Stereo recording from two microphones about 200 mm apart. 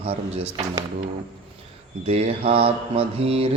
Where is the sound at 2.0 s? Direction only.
30° right (ahead or behind).